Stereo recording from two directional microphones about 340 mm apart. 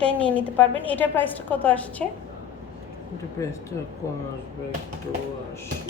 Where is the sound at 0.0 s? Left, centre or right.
Centre.